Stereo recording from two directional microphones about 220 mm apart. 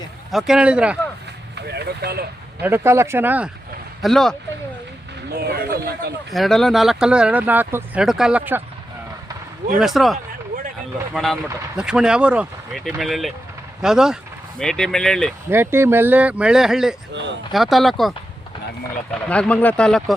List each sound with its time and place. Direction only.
0.3 s speech: centre (ahead or behind)
1.5 s vehicle: 50° right (ahead or behind)
2.6 s speech: 10° right (ahead or behind)
5.3 s a sound: 45° right (ahead or behind)
6.3 s speech: centre (ahead or behind)
9.7 s speech: centre (ahead or behind)
15.4 s speech: 10° right (ahead or behind)
19.3 s speech: 5° left (ahead or behind)